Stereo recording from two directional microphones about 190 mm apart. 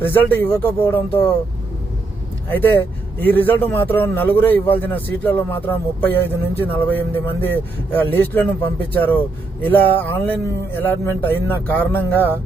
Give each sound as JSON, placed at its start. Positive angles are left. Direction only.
{"t": 0.0, "sound": "a man's voice", "side_deg": 10}
{"t": 2.5, "sound": "a man's voice", "side_deg": 10}